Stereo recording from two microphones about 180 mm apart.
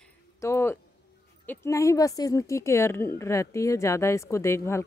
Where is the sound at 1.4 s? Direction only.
15° left (ahead or behind).